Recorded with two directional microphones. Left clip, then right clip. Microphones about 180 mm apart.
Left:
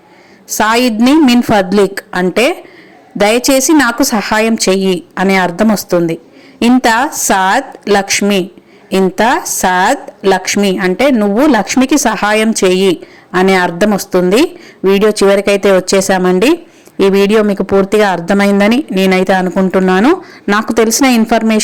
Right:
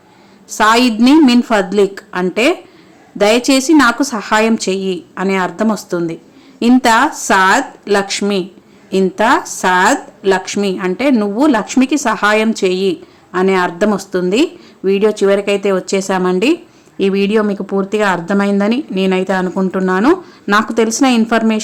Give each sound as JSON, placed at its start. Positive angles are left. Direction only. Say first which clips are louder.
{"t": 0.5, "sound": "speech", "louder": "even", "side_deg": 20}